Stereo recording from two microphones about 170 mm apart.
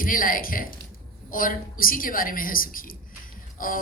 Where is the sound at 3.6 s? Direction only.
55° left (ahead or behind).